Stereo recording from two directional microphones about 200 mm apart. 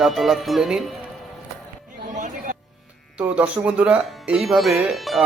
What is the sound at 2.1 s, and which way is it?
Chatter, 40° right (ahead or behind).